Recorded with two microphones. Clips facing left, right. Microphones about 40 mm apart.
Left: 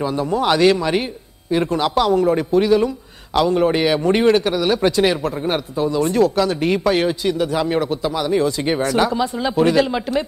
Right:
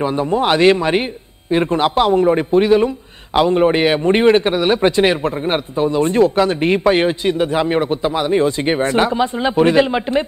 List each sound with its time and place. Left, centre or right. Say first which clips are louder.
0.0 s a man's voice: right 3 dB; right